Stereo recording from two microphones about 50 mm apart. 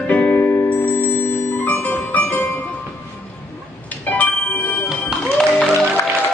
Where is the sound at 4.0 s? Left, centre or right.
Left.